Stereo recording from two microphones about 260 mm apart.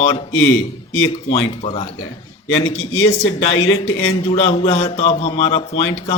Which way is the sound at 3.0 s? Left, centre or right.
Left.